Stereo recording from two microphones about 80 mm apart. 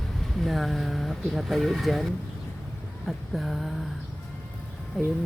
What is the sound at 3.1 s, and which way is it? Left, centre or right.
Speech, centre.